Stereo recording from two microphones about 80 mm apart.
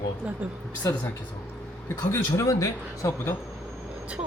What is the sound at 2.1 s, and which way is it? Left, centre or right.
A man's voice, left.